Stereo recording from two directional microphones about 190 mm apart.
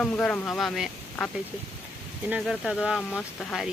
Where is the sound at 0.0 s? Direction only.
5° left (ahead or behind).